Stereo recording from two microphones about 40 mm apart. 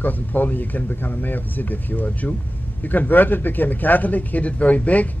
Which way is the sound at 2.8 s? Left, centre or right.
Left.